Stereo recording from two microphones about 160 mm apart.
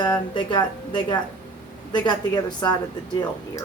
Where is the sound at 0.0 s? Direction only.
25° left (ahead or behind).